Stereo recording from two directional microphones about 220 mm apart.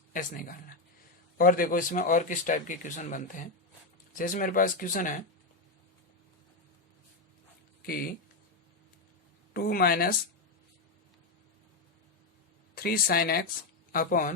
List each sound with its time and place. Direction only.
0.1 s a man's voice: 35° left (ahead or behind)
7.8 s speech: 40° left (ahead or behind)
9.5 s speech: 45° left (ahead or behind)
12.7 s a man's voice: 45° left (ahead or behind)